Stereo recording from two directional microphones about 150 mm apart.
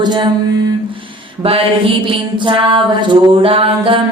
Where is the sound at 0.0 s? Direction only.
30° right (ahead or behind).